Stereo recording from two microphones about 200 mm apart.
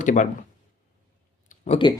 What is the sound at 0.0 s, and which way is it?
Speech, 40° left (ahead or behind).